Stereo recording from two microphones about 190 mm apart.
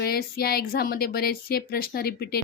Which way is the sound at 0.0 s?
55° left (ahead or behind).